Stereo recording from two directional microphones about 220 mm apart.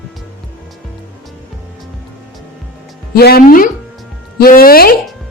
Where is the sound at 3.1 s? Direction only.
45° left (ahead or behind).